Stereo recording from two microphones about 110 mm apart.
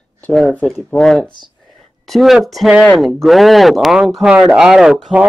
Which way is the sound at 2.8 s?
Centre (ahead or behind).